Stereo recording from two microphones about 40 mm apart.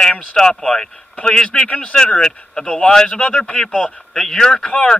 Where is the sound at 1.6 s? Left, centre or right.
Left.